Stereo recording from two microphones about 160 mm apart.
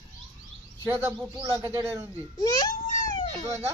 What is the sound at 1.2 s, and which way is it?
Speech, 20° right (ahead or behind).